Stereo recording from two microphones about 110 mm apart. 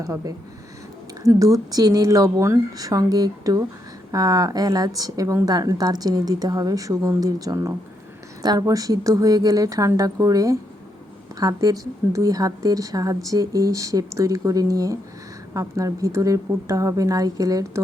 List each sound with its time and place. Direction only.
0.0 s a woman's voice: 30° right (ahead or behind)